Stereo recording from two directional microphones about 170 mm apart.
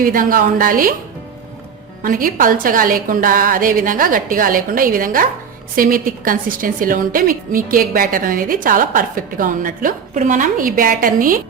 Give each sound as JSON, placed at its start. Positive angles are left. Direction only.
{"t": 0.0, "sound": "a woman's voice", "side_deg": -55}
{"t": 2.0, "sound": "a woman's voice", "side_deg": -55}